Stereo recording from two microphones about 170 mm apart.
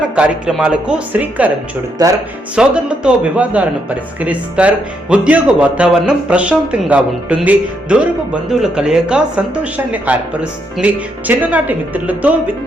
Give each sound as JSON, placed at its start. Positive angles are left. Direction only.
{"t": 0.2, "sound": "speech", "side_deg": -5}
{"t": 2.0, "sound": "speech", "side_deg": -20}
{"t": 2.6, "sound": "speech", "side_deg": -5}